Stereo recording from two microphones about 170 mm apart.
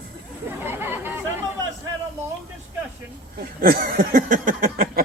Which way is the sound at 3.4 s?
60° right (ahead or behind).